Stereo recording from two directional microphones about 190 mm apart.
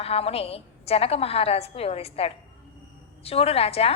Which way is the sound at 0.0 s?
30° left (ahead or behind).